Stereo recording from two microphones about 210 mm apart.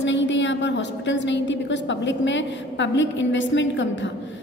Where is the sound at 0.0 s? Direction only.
60° left (ahead or behind).